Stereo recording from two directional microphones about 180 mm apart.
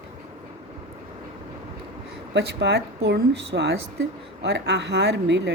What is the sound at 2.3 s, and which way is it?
A woman's voice, 70° right (ahead or behind).